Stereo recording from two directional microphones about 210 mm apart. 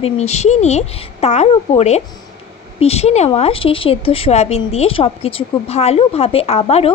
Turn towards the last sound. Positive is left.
turn(degrees=30)  # may be behind; listen again after turning